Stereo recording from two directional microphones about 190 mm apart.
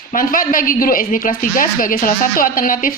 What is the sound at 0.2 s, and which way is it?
A woman's voice, 45° left (ahead or behind).